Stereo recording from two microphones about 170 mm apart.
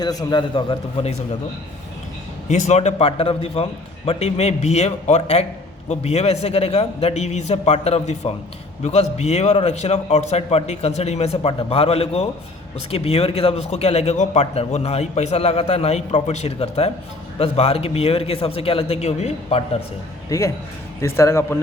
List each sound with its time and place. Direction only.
0.0 s a man's voice: 20° left (ahead or behind)
2.5 s a man's voice: 45° left (ahead or behind)
20.3 s a man's voice: 20° left (ahead or behind)